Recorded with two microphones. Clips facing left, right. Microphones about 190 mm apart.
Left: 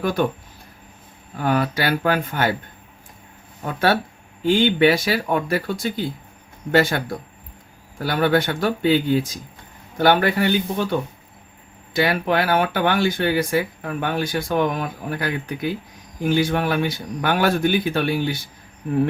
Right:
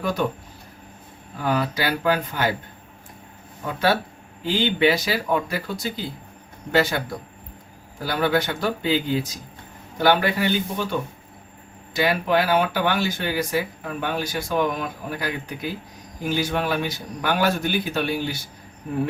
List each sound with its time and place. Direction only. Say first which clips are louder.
0.0 s speech: left 3 dB; 55° left (ahead or behind)
1.4 s speech: left 3 dB; 55° left (ahead or behind)
4.4 s speech: left 4 dB; 50° left (ahead or behind)
8.0 s speech: left 3 dB; 55° left (ahead or behind)
11.9 s speech: left 1 dB; 55° left (ahead or behind)